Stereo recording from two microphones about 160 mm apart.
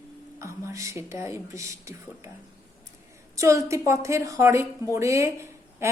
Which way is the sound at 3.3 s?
20° right (ahead or behind).